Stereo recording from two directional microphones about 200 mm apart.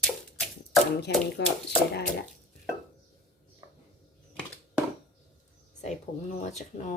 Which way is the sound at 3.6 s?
15° right (ahead or behind).